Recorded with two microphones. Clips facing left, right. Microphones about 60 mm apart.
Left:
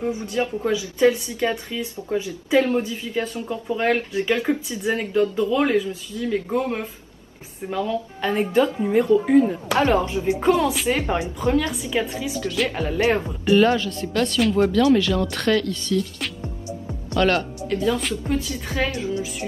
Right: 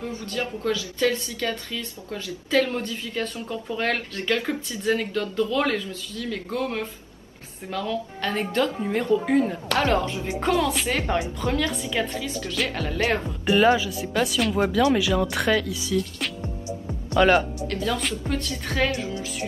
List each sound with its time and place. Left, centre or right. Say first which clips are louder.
0.0 s a woman's voice: left 6 dB; centre
13.5 s speech: left 2 dB; centre
17.6 s a woman's voice: left 4 dB; centre